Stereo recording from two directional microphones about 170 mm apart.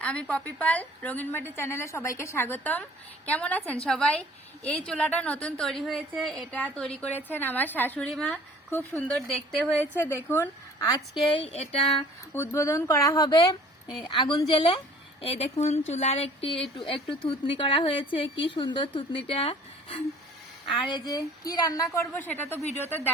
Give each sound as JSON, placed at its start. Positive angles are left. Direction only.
{"t": 0.0, "sound": "a woman's voice", "side_deg": 5}
{"t": 11.3, "sound": "speech", "side_deg": 35}
{"t": 12.3, "sound": "speech", "side_deg": 15}
{"t": 20.8, "sound": "a woman's voice", "side_deg": 25}